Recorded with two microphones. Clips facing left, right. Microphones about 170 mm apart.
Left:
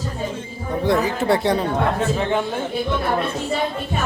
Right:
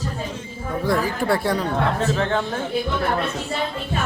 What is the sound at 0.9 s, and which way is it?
Speech, 20° left (ahead or behind).